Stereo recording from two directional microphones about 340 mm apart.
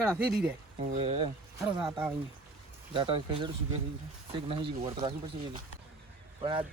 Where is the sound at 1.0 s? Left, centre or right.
Centre.